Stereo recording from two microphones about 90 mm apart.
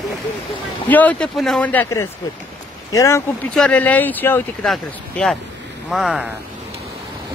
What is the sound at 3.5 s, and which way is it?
Speech, 10° left (ahead or behind).